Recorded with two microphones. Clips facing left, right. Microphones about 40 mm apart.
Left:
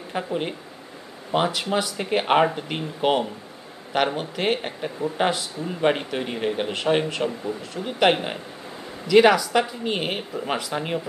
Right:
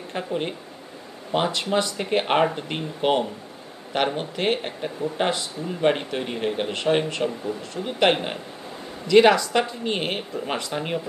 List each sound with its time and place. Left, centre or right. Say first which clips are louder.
0.1 s speech: left 1 dB; centre